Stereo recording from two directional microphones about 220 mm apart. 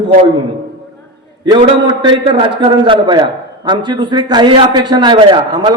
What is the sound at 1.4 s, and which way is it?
A man's voice, 20° right (ahead or behind).